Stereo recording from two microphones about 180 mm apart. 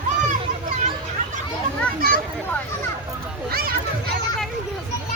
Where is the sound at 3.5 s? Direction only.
55° right (ahead or behind).